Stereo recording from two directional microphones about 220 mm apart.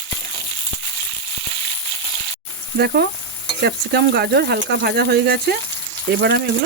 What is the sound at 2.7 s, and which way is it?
Speech, 45° right (ahead or behind).